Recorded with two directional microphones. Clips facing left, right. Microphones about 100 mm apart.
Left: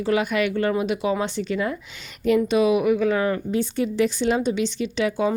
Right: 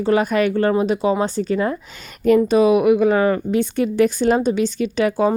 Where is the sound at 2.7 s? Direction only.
50° right (ahead or behind).